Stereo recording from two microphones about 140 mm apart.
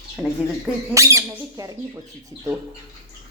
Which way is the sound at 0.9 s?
20° right (ahead or behind).